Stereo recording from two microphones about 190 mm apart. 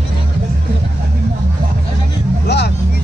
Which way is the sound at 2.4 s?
60° left (ahead or behind).